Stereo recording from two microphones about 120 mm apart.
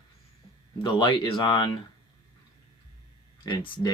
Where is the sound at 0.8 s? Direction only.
45° left (ahead or behind).